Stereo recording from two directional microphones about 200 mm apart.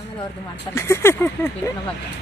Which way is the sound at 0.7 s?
15° left (ahead or behind).